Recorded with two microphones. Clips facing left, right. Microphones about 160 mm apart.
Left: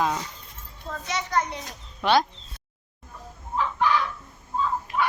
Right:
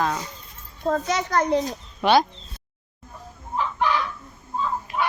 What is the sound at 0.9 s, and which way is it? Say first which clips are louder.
Speech: right 8 dB; 45° right (ahead or behind).